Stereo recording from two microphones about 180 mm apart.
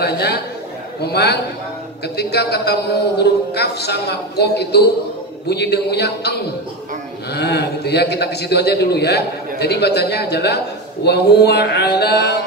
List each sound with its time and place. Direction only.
0.0 s a man's voice: 65° left (ahead or behind)
7.3 s a man's voice: 65° left (ahead or behind)